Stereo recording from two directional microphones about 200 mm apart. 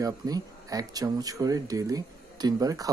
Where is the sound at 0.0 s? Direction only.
15° right (ahead or behind).